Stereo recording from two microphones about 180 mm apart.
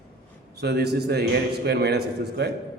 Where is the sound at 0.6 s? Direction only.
65° right (ahead or behind).